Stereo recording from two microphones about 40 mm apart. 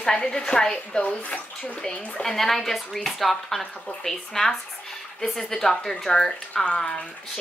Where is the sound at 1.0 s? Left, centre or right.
Left.